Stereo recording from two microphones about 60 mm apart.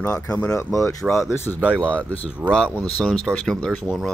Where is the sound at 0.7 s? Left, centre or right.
Left.